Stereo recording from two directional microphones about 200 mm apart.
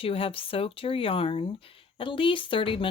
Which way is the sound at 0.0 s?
30° left (ahead or behind).